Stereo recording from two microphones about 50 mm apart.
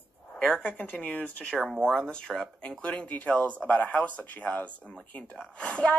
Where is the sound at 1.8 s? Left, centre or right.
Centre.